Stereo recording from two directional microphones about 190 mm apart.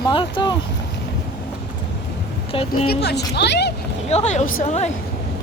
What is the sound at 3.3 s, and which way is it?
Speech, 65° left (ahead or behind).